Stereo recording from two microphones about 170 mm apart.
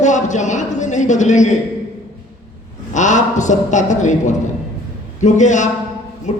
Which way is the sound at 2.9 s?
45° left (ahead or behind).